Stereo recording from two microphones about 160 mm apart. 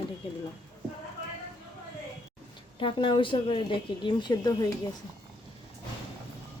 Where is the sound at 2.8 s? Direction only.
30° left (ahead or behind).